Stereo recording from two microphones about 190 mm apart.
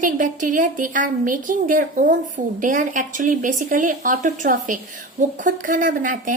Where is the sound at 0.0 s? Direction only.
45° right (ahead or behind).